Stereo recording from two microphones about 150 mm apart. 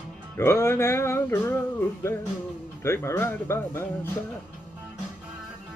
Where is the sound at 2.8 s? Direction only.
15° left (ahead or behind).